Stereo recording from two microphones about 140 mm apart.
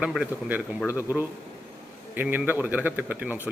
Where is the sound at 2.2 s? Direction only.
15° right (ahead or behind).